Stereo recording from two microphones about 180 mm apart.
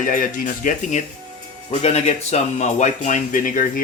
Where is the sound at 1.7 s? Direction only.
35° left (ahead or behind).